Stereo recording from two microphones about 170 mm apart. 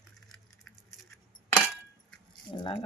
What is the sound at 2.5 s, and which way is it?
Speech, 30° left (ahead or behind).